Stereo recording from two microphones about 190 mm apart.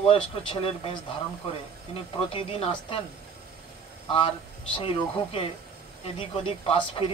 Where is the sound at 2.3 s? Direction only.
30° left (ahead or behind).